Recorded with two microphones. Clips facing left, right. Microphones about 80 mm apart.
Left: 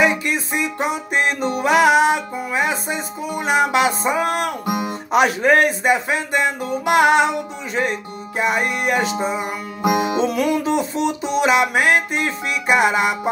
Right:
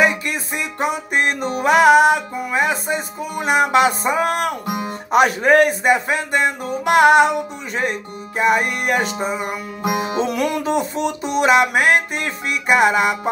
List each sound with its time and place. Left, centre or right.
0.2 s music: right
4.6 s music: centre
5.1 s music: right
8.4 s music: right